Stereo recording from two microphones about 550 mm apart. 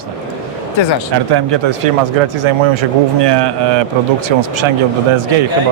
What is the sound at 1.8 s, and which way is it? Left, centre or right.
A man's voice, right.